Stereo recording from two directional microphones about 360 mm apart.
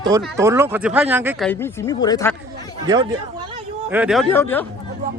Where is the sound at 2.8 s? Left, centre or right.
Centre.